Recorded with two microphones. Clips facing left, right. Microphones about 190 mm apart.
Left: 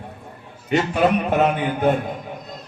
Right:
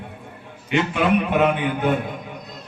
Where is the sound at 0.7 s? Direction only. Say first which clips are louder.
Left 1 dB; 40° left (ahead or behind).